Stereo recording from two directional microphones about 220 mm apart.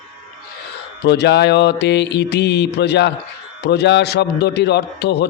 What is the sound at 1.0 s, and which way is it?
Speech, 50° left (ahead or behind).